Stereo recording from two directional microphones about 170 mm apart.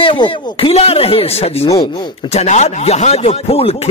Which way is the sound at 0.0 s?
30° left (ahead or behind).